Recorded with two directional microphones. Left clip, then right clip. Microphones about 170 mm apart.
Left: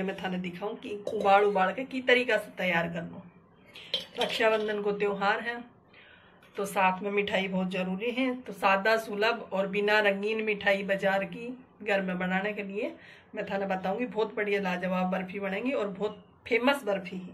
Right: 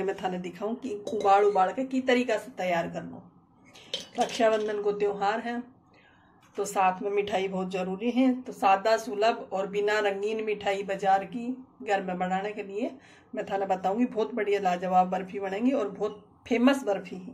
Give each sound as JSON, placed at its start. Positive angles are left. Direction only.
{"t": 0.0, "sound": "speech", "side_deg": -50}
{"t": 4.1, "sound": "speech", "side_deg": -40}